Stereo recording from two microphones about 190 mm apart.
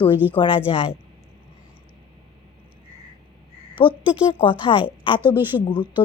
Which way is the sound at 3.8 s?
25° left (ahead or behind).